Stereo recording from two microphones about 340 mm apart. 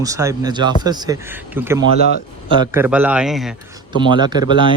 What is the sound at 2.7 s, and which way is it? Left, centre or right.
Speech, centre.